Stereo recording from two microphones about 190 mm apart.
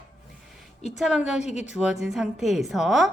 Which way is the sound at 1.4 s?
35° left (ahead or behind).